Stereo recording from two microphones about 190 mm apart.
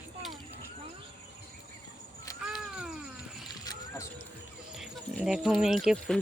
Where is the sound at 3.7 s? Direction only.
20° left (ahead or behind).